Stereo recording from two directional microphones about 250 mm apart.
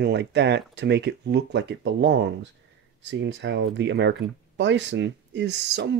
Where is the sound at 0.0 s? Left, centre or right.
Right.